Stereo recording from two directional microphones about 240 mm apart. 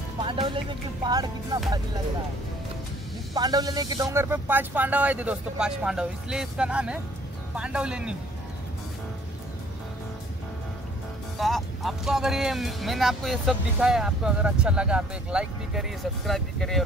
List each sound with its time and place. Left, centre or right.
0.2 s speech: right
3.3 s speech: centre
11.3 s speech: centre